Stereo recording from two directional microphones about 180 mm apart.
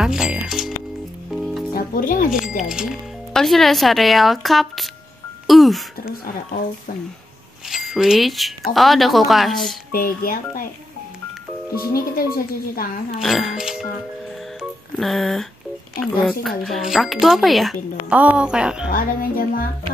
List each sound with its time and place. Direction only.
0.0 s music: 5° right (ahead or behind)
1.7 s speech: 50° left (ahead or behind)
2.3 s speech: 5° right (ahead or behind)
7.7 s speech: centre (ahead or behind)
9.9 s speech: 55° left (ahead or behind)
12.2 s speech: 55° left (ahead or behind)
13.2 s speech: centre (ahead or behind)
14.6 s music: centre (ahead or behind)
16.0 s speech: 5° left (ahead or behind)
18.9 s speech: 50° left (ahead or behind)